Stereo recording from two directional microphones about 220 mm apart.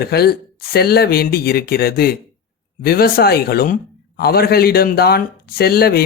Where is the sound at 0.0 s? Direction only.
45° left (ahead or behind).